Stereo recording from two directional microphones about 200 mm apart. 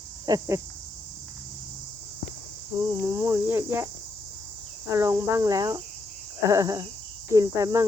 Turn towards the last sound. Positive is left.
turn(degrees=-15)  # may be behind; listen again after turning